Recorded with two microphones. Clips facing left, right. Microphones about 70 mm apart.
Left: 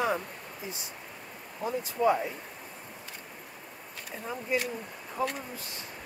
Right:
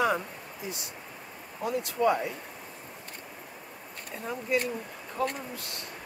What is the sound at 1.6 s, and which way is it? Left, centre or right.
Speech, right.